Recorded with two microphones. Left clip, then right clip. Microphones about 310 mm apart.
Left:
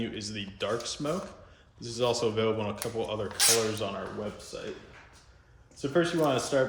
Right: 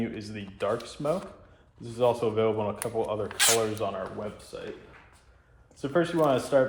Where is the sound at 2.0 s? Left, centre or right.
Centre.